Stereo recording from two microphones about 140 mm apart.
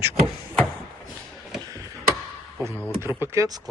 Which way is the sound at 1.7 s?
20° right (ahead or behind).